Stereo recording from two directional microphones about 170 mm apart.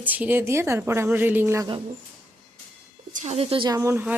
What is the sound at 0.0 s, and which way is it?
A woman's voice, 10° right (ahead or behind).